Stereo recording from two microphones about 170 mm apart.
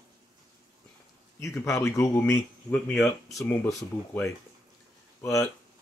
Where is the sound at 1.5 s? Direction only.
Centre (ahead or behind).